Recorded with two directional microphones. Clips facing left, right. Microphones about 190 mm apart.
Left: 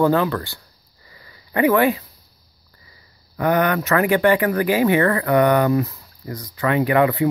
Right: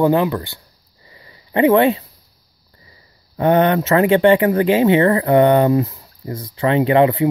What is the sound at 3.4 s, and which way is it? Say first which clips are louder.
Speech: right 4 dB; 25° right (ahead or behind).